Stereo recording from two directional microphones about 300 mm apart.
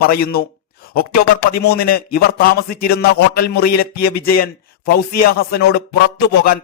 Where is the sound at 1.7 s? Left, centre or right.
Left.